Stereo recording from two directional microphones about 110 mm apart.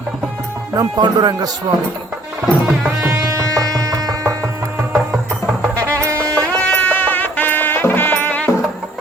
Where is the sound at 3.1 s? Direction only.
30° right (ahead or behind).